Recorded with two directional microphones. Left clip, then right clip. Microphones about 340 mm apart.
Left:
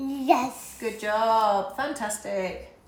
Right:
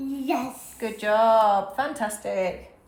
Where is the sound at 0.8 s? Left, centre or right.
Centre.